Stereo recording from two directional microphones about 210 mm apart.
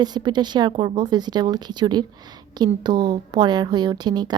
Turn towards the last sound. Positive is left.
turn(degrees=-20)  # may be behind; listen again after turning